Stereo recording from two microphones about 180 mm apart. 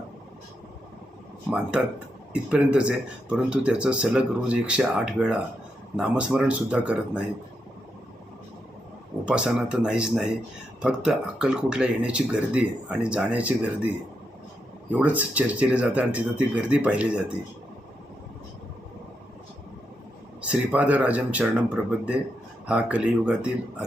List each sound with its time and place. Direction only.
1.5 s speech: 5° right (ahead or behind)
9.2 s speech: 5° right (ahead or behind)
20.4 s speech: 5° right (ahead or behind)